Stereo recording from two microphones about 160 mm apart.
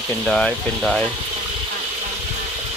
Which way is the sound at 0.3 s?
5° left (ahead or behind).